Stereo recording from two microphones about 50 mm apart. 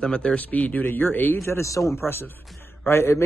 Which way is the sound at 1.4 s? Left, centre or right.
Left.